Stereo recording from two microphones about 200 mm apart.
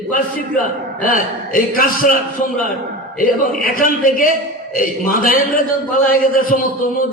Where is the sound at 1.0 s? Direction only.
45° left (ahead or behind).